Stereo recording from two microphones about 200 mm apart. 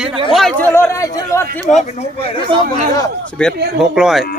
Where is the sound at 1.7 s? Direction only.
35° left (ahead or behind).